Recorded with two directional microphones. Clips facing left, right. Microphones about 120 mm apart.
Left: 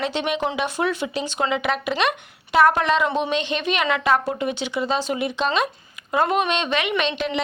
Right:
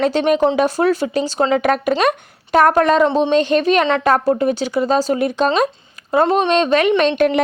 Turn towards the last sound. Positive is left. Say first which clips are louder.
# right 9 dB
turn(degrees=-50)  # may be behind; listen again after turning